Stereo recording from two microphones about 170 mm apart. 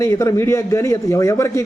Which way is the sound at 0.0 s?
20° left (ahead or behind).